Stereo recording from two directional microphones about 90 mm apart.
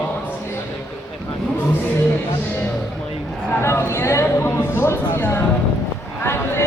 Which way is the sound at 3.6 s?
30° left (ahead or behind).